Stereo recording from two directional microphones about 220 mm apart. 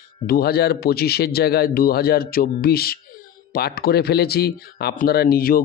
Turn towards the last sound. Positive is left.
turn(degrees=45)  # may be behind; listen again after turning